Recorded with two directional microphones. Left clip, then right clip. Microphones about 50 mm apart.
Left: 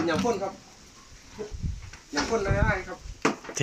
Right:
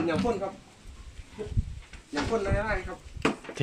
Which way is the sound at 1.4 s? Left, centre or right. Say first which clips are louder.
Left 1 dB; centre.